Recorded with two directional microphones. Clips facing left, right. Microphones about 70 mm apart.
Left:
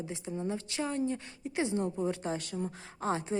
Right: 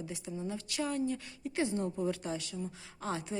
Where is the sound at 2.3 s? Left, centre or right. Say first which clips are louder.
Left 3 dB; left.